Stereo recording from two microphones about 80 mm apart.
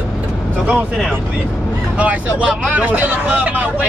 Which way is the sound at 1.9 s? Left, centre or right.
Centre.